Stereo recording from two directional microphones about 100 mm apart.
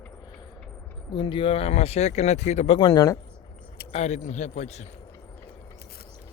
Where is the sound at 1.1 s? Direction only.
55° left (ahead or behind); by 2.8 s 90° left.